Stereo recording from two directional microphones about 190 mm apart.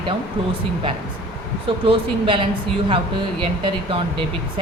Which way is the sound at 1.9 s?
25° right (ahead or behind).